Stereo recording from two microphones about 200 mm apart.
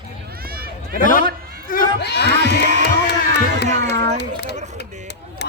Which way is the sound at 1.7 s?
50° left (ahead or behind).